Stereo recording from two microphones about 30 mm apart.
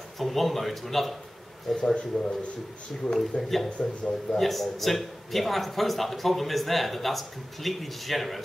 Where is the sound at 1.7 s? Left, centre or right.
Left.